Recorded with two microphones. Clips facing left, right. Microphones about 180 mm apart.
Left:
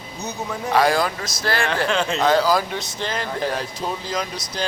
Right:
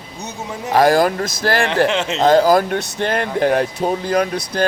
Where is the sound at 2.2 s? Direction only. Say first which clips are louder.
Right 7 dB; 50° right (ahead or behind).